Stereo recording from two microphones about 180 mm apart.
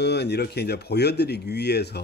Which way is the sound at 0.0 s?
65° left (ahead or behind).